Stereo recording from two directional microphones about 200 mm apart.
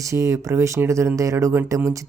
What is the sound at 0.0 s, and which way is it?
Speech, 15° right (ahead or behind).